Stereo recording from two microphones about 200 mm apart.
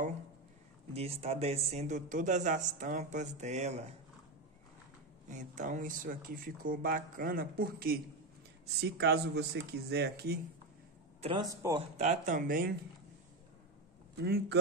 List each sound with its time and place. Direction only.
0.9 s a man's voice: 30° right (ahead or behind)
5.3 s speech: 40° right (ahead or behind)
11.1 s a man's voice: 30° right (ahead or behind)
11.4 s speech: 15° right (ahead or behind)
12.0 s speech: 40° right (ahead or behind)
14.1 s speech: 55° right (ahead or behind)